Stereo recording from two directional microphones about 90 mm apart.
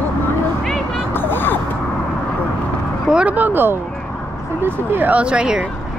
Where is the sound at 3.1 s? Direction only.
15° right (ahead or behind).